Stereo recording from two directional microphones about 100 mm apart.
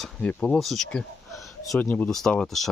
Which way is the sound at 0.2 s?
15° left (ahead or behind).